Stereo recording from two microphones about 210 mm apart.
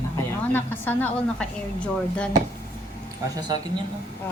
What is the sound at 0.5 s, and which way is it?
A woman's voice, 10° left (ahead or behind).